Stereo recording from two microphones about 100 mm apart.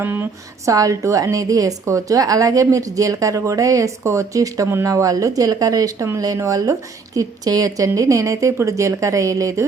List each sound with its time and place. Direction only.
0.0 s speech: 20° right (ahead or behind)
0.7 s a woman's voice: 35° right (ahead or behind)